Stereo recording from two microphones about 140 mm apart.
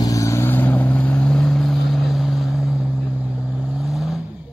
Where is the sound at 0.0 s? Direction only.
25° left (ahead or behind).